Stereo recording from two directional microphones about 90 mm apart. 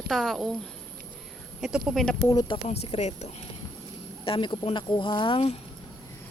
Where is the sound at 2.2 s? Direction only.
45° left (ahead or behind).